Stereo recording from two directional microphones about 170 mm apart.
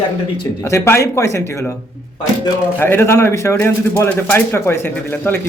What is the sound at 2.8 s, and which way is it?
Speech, 15° left (ahead or behind).